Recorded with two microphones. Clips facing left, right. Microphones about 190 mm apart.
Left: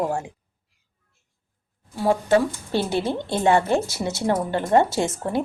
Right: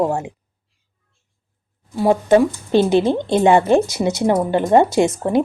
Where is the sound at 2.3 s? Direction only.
20° right (ahead or behind).